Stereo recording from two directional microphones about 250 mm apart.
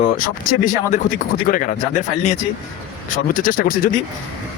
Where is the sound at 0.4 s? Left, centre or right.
Left.